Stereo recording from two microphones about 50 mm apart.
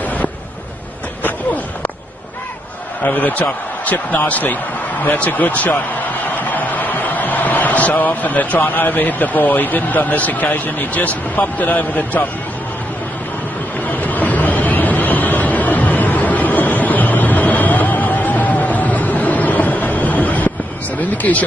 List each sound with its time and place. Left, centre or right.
3.1 s speech: left
13.8 s vehicle: left